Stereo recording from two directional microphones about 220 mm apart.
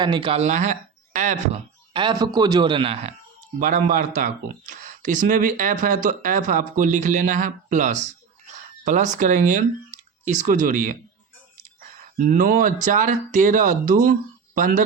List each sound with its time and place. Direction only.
0.0 s speech: 20° right (ahead or behind)
12.1 s speech: 40° right (ahead or behind)